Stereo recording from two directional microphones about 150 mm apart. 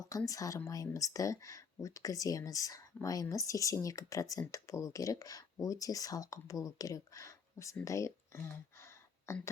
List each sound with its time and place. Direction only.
0.3 s speech: 20° left (ahead or behind)